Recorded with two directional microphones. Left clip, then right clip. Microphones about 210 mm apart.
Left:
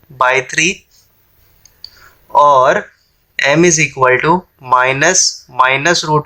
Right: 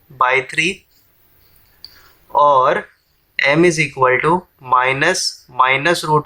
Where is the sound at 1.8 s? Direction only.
15° left (ahead or behind).